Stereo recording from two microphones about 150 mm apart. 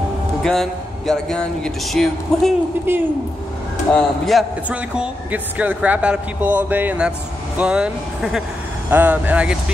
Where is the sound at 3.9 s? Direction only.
Centre (ahead or behind).